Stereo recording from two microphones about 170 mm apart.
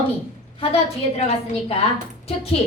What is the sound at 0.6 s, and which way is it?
Speech, 35° left (ahead or behind).